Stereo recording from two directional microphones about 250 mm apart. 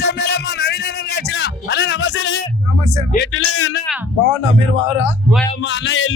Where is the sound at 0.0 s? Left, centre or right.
Left.